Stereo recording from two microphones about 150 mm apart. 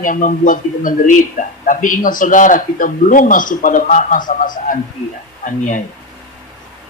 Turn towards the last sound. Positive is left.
turn(degrees=60)  # may be behind; listen again after turning